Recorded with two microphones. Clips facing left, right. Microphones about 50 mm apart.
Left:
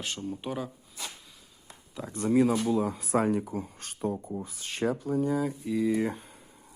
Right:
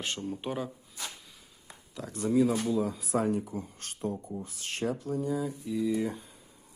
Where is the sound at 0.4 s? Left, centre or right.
Centre.